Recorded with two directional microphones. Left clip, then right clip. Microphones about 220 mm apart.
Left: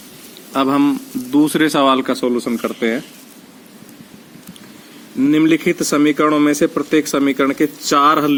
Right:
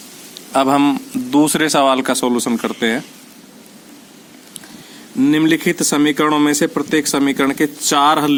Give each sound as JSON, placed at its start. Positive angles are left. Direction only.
{"t": 0.5, "sound": "speech", "side_deg": -25}
{"t": 5.2, "sound": "speech", "side_deg": -35}